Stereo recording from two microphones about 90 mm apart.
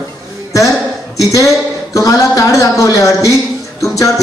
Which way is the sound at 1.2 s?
35° left (ahead or behind).